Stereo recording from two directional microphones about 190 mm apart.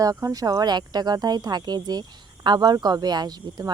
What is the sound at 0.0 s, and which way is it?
Speech, 15° right (ahead or behind).